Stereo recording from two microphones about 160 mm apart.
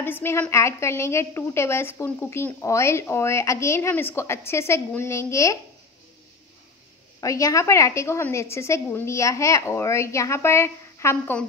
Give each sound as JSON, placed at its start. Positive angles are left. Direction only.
{"t": 0.0, "sound": "a woman's voice", "side_deg": 15}
{"t": 7.2, "sound": "a woman's voice", "side_deg": 20}